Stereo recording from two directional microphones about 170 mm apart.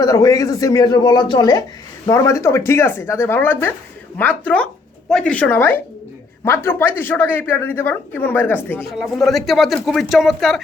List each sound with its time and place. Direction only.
0.0 s speech: 20° left (ahead or behind)
8.9 s speech: centre (ahead or behind)